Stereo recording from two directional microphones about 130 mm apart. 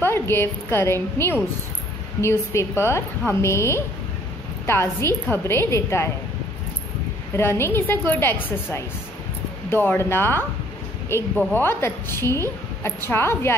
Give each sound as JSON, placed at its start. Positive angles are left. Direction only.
{"t": 0.0, "sound": "a woman's voice", "side_deg": 15}
{"t": 7.3, "sound": "a woman's voice", "side_deg": 20}
{"t": 9.7, "sound": "a woman's voice", "side_deg": 15}